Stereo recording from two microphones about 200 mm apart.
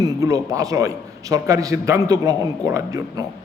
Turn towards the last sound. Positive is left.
turn(degrees=-15)  # may be behind; listen again after turning